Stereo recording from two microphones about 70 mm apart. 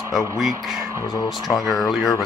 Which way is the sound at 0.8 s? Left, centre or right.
Right.